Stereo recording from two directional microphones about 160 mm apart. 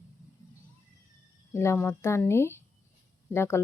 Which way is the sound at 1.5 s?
15° left (ahead or behind).